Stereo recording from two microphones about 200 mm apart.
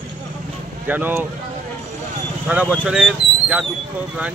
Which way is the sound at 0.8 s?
10° right (ahead or behind).